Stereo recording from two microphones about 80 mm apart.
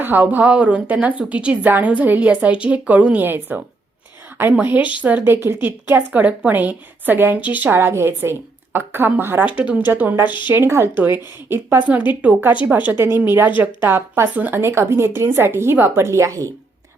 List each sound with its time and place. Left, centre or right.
0.0 s a woman's voice: right
4.8 s a woman's voice: left
5.0 s a woman's voice: right
10.2 s speech: left
10.5 s a woman's voice: right